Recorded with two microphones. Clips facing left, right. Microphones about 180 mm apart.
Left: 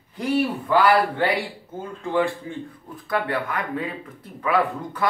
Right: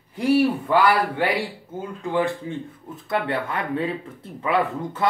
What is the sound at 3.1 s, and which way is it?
Speech, 25° right (ahead or behind).